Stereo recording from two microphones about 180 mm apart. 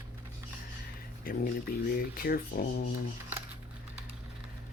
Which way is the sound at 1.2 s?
55° left (ahead or behind).